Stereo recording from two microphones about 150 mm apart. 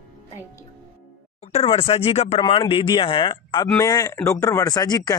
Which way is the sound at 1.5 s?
40° left (ahead or behind).